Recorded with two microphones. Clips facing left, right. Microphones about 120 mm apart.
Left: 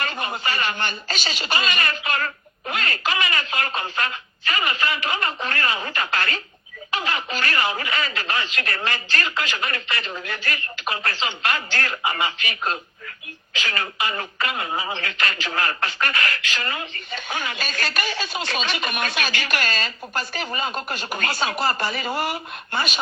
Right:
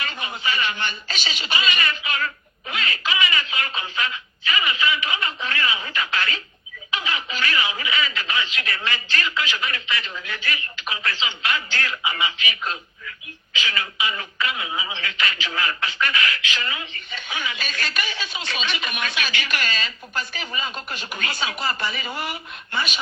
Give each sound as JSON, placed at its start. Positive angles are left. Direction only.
{"t": 0.0, "sound": "speech", "side_deg": 45}